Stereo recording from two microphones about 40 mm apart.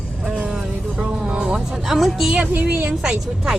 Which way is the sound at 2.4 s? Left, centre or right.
Right.